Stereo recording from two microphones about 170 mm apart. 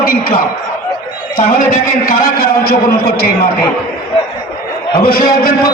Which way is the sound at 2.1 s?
55° left (ahead or behind).